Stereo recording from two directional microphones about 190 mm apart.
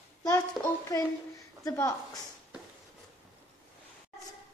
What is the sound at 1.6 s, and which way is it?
Speech, 15° left (ahead or behind).